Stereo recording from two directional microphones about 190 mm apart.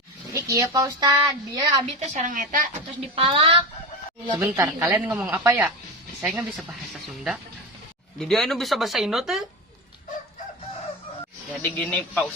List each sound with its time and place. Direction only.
0.3 s a woman's voice: 20° right (ahead or behind)
2.0 s a woman's voice: 40° right (ahead or behind)
3.2 s a woman's voice: 30° right (ahead or behind)
4.4 s a woman's voice: 15° right (ahead or behind)
11.9 s a man's voice: 10° left (ahead or behind)